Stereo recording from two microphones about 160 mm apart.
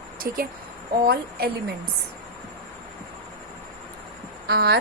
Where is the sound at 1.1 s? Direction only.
75° right (ahead or behind).